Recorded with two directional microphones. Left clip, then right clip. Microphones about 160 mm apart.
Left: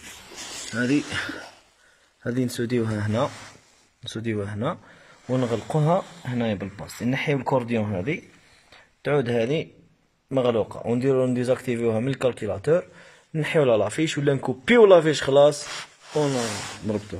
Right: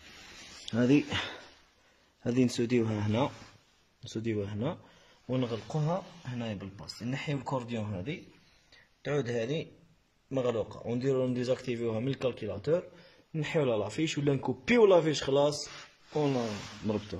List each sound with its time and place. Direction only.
0.7 s speech: 15° right (ahead or behind)
2.2 s speech: 15° right (ahead or behind)
5.3 s speech: centre (ahead or behind)
5.7 s speech: 15° left (ahead or behind); by 17.2 s 10° right (ahead or behind)